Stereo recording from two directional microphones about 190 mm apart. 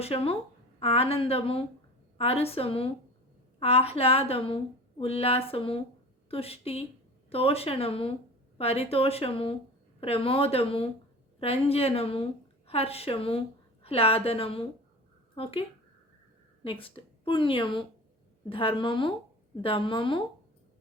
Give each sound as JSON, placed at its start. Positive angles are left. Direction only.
{"t": 0.0, "sound": "a woman's voice", "side_deg": 30}
{"t": 16.8, "sound": "a woman's voice", "side_deg": 25}